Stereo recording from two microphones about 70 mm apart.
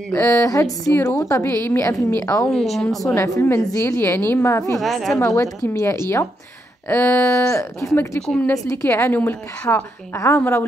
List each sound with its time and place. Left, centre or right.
0.1 s a woman's voice: left
2.5 s a woman's voice: centre
3.2 s a woman's voice: left
4.7 s a woman's voice: centre
5.2 s a woman's voice: left
8.8 s a woman's voice: left